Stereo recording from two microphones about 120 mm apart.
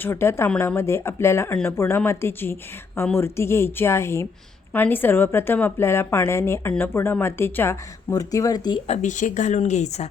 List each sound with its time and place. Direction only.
0.0 s a woman's voice: 20° left (ahead or behind)
8.1 s speech: 30° left (ahead or behind)
8.9 s speech: 90° left
9.6 s speech: 75° left (ahead or behind)